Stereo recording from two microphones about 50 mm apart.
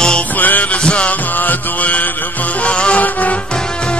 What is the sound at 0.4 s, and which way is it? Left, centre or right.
Music, left.